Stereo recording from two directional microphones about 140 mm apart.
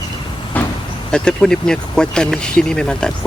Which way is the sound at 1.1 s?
5° left (ahead or behind).